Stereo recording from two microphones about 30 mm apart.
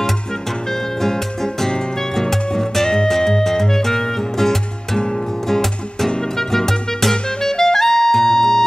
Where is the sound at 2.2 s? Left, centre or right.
Centre.